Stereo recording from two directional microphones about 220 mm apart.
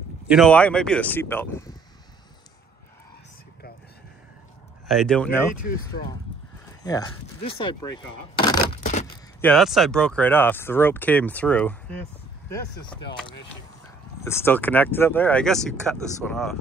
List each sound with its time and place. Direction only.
0.3 s speech: 5° left (ahead or behind)
4.8 s speech: centre (ahead or behind)
5.9 s speech: 40° left (ahead or behind)
6.8 s speech: 15° left (ahead or behind)
9.4 s speech: 5° left (ahead or behind)
14.2 s speech: 10° left (ahead or behind)